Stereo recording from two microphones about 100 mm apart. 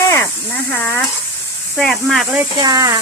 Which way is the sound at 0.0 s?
30° left (ahead or behind).